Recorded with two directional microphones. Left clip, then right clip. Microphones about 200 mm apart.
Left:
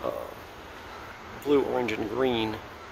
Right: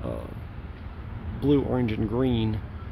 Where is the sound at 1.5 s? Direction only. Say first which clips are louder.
Left 1 dB; 5° left (ahead or behind).